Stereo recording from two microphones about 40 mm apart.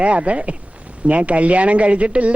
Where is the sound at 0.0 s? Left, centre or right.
Right.